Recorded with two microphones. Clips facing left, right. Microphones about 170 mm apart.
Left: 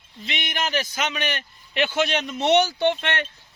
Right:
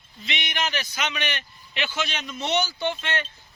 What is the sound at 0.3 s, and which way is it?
A man's voice, 50° left (ahead or behind).